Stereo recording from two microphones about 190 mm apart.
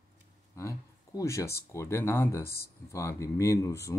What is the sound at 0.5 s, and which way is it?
Speech, 15° left (ahead or behind).